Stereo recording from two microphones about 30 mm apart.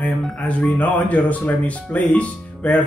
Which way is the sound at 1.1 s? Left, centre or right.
Left.